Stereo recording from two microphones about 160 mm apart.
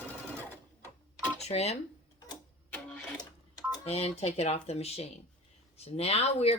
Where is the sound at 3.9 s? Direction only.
40° left (ahead or behind).